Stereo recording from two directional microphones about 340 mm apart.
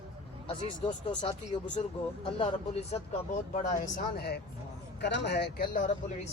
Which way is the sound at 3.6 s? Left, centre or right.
Left.